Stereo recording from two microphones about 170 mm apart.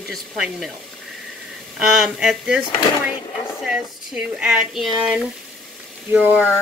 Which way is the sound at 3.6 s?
5° right (ahead or behind).